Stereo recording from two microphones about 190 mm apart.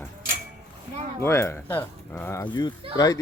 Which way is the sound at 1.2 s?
15° left (ahead or behind).